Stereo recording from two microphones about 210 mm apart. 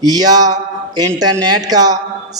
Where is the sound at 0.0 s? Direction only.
20° right (ahead or behind).